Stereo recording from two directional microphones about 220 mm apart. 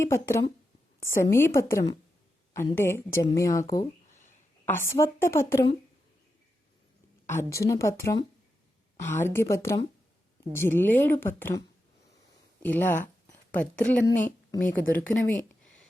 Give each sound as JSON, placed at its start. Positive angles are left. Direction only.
{"t": 0.0, "sound": "a woman's voice", "side_deg": 15}
{"t": 4.1, "sound": "a sound", "side_deg": 35}
{"t": 4.6, "sound": "a woman's voice", "side_deg": 10}
{"t": 7.3, "sound": "a woman's voice", "side_deg": 15}
{"t": 12.6, "sound": "a woman's voice", "side_deg": 10}